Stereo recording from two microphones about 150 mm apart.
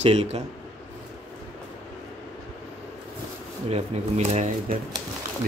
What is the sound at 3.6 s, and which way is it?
Speech, 45° right (ahead or behind).